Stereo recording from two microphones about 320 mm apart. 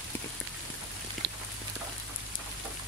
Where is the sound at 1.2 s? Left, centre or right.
Right.